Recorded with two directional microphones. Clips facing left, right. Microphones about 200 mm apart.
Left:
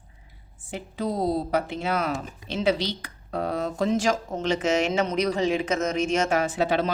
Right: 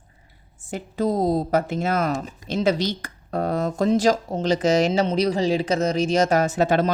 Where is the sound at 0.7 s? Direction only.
45° right (ahead or behind).